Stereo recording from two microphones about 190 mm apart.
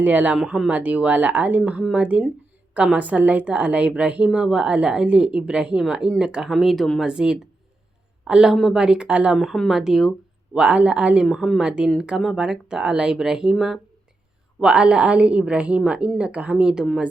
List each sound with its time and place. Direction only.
0.0 s a woman's voice: 10° right (ahead or behind)